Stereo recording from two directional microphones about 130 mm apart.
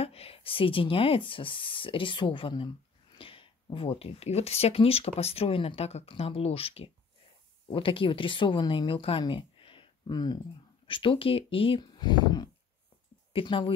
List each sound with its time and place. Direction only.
0.0 s speech: 50° left (ahead or behind)
9.2 s a sound: 45° left (ahead or behind)
10.9 s speech: 40° left (ahead or behind)